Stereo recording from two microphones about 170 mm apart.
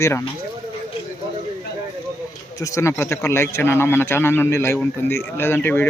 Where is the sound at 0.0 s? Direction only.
15° left (ahead or behind).